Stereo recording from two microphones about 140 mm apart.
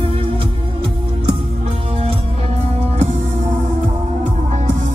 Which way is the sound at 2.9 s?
55° right (ahead or behind).